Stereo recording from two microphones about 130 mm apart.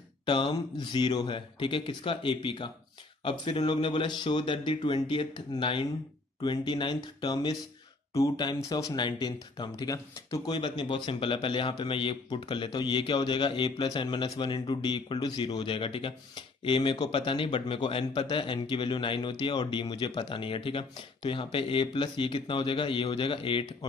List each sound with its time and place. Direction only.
0.2 s speech: 40° left (ahead or behind)